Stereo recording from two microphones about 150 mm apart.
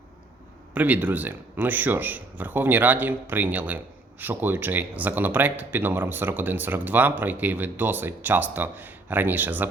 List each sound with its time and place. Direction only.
0.7 s speech: 10° right (ahead or behind)